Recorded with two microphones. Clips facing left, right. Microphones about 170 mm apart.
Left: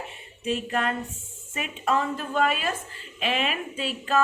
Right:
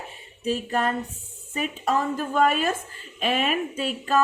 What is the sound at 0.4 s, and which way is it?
A woman's voice, 35° right (ahead or behind).